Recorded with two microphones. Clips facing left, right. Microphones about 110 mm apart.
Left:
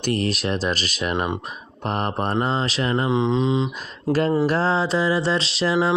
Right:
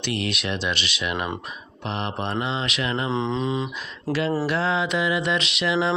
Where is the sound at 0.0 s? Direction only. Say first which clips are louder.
Left 4 dB; 40° left (ahead or behind).